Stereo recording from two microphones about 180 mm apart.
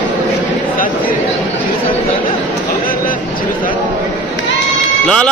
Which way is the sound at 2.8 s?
50° left (ahead or behind).